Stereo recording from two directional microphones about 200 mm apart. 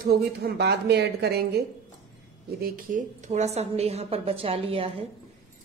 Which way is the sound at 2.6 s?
45° right (ahead or behind).